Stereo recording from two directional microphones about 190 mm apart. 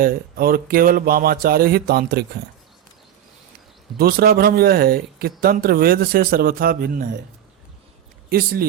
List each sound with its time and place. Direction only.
0.0 s speech: 50° right (ahead or behind)
3.9 s speech: 50° right (ahead or behind)
8.3 s speech: 50° right (ahead or behind)